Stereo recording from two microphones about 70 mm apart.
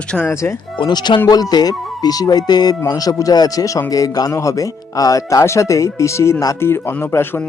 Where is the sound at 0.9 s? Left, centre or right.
Left.